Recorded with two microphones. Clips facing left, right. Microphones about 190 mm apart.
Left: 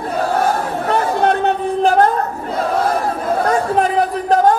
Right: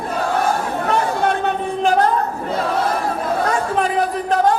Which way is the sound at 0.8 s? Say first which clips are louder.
Left 3 dB; 40° left (ahead or behind).